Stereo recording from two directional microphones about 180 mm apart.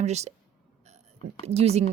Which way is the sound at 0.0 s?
40° right (ahead or behind).